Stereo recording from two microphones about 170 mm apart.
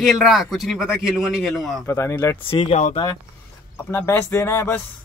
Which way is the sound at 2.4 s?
35° left (ahead or behind).